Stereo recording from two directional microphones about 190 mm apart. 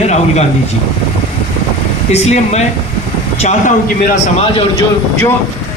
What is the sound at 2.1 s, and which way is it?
A man's voice, 35° left (ahead or behind).